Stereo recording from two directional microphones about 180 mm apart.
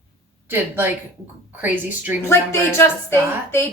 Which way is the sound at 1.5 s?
10° right (ahead or behind).